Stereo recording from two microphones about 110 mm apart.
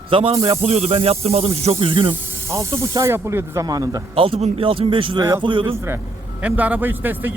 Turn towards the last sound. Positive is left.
turn(degrees=-20)  # may be behind; listen again after turning